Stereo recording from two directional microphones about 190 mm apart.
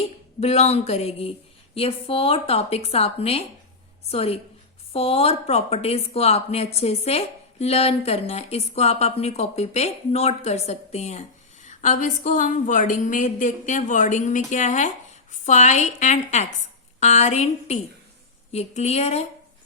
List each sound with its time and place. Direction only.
0.3 s speech: 35° left (ahead or behind)